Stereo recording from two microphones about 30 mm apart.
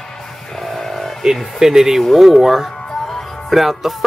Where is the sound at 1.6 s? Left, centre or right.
Centre.